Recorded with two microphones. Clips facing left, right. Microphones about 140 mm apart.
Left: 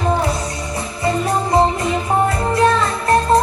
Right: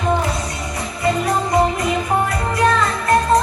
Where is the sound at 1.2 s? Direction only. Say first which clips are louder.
Left 3 dB; 25° left (ahead or behind).